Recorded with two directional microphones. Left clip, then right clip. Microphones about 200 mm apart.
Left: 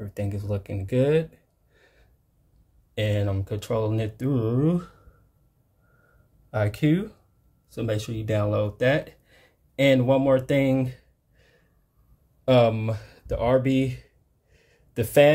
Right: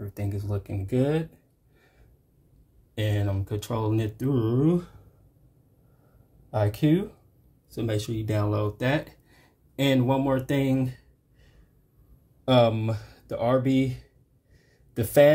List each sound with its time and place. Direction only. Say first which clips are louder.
0.0 s speech: left 3 dB; 30° left (ahead or behind)
2.9 s speech: left 4 dB; 30° left (ahead or behind)
6.5 s speech: even; 25° left (ahead or behind)
14.5 s a sound: left 1 dB; 25° left (ahead or behind)